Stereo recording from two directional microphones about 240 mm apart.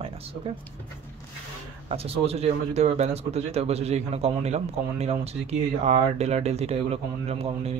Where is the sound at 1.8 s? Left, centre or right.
Right.